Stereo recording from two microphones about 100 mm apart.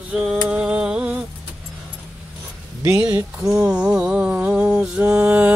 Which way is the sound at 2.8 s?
15° right (ahead or behind).